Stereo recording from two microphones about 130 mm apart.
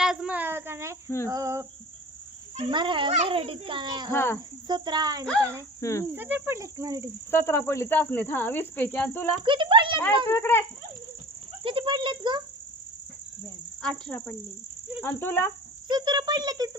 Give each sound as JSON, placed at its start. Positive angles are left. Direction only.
{"t": 0.0, "sound": "cricket", "side_deg": -5}
{"t": 2.6, "sound": "a child's voice", "side_deg": -40}
{"t": 4.1, "sound": "cricket", "side_deg": 20}
{"t": 4.7, "sound": "a child's voice", "side_deg": -30}
{"t": 5.4, "sound": "cricket", "side_deg": -20}
{"t": 5.8, "sound": "cricket", "side_deg": 25}
{"t": 6.1, "sound": "cricket", "side_deg": -15}
{"t": 7.3, "sound": "speech", "side_deg": 20}
{"t": 9.4, "sound": "a child's voice", "side_deg": -40}
{"t": 10.2, "sound": "speech", "side_deg": 20}
{"t": 11.6, "sound": "speech", "side_deg": -40}
{"t": 13.8, "sound": "speech", "side_deg": 5}
{"t": 15.9, "sound": "a child's voice", "side_deg": -35}